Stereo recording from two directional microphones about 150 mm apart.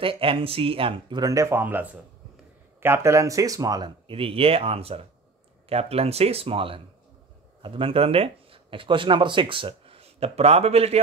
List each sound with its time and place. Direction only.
0.0 s speech: 35° right (ahead or behind)